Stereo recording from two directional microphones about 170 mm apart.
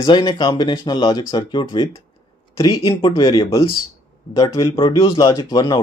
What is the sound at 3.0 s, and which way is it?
Speech, 25° left (ahead or behind).